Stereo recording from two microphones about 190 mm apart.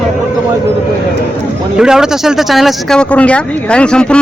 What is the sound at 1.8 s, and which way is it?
Speech, 5° right (ahead or behind).